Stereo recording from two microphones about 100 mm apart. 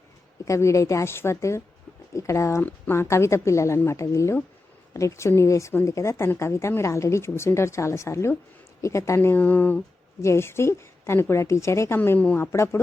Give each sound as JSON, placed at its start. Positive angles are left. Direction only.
{"t": 0.4, "sound": "a woman's voice", "side_deg": 30}
{"t": 10.2, "sound": "a woman's voice", "side_deg": 25}
{"t": 11.9, "sound": "a woman's voice", "side_deg": 15}
{"t": 12.5, "sound": "a woman's voice", "side_deg": 30}